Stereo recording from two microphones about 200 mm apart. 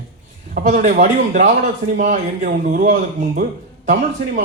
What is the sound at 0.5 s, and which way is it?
Speech, 40° right (ahead or behind).